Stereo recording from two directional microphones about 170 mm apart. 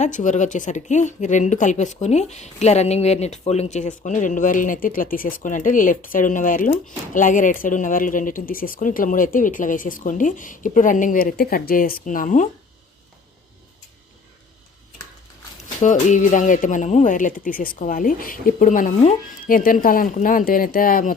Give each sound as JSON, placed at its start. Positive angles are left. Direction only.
{"t": 0.0, "sound": "speech", "side_deg": 45}
{"t": 15.8, "sound": "speech", "side_deg": 45}